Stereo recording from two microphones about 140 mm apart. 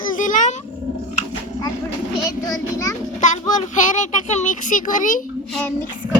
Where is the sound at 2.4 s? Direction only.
25° left (ahead or behind).